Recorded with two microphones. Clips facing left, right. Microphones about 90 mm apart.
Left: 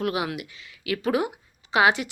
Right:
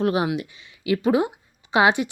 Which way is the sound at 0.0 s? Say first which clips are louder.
Right 5 dB; 30° right (ahead or behind).